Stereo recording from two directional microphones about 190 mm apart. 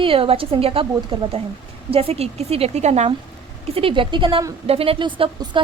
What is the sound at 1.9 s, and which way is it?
A woman's voice, 30° right (ahead or behind).